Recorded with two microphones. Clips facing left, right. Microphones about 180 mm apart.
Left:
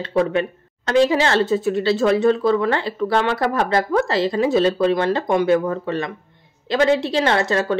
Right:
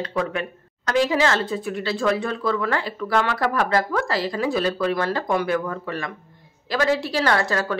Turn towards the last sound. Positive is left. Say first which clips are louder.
# left 3 dB
turn(degrees=25)  # may be behind; listen again after turning